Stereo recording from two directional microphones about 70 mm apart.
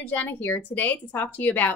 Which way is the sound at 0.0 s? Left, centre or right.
Left.